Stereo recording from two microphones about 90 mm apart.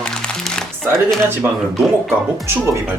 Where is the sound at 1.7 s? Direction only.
Centre (ahead or behind).